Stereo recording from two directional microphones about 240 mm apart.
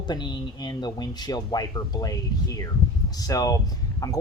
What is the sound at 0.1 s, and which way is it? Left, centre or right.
Speech, centre.